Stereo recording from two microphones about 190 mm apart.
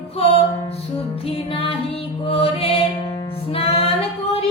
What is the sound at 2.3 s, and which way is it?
Music, 30° left (ahead or behind).